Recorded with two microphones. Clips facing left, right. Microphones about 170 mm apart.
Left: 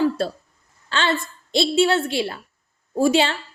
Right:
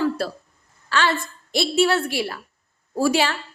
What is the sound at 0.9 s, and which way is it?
A woman's voice, 20° left (ahead or behind).